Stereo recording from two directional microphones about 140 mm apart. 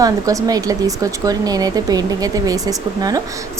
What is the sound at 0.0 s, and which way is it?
A woman's voice, 25° right (ahead or behind).